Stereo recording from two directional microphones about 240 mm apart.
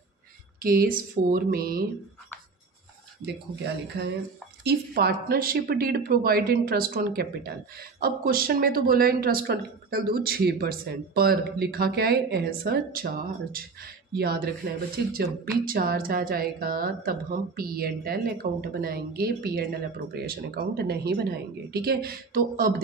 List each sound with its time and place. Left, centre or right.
0.6 s speech: right
4.6 s speech: right